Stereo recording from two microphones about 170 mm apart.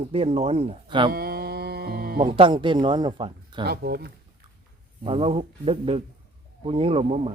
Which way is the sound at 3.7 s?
70° right (ahead or behind).